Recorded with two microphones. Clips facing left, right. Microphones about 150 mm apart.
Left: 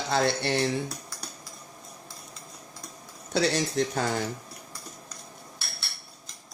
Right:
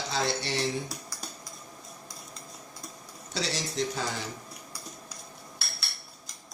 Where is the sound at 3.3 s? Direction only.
55° left (ahead or behind).